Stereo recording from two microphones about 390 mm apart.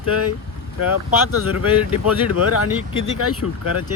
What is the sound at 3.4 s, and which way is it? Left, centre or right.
Speech, left.